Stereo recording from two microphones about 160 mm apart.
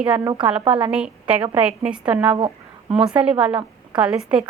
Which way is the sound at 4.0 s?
5° right (ahead or behind).